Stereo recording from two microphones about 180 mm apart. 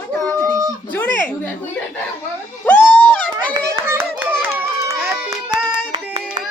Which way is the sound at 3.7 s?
10° right (ahead or behind).